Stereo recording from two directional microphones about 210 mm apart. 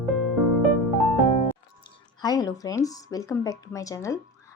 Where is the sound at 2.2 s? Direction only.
20° left (ahead or behind).